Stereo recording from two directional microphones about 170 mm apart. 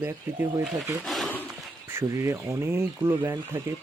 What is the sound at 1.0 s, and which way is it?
Wild animals, centre (ahead or behind).